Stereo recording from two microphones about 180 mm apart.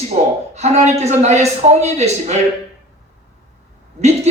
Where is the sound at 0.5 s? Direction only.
40° right (ahead or behind).